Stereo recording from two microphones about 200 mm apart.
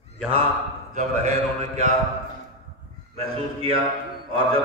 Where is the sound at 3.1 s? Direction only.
30° right (ahead or behind).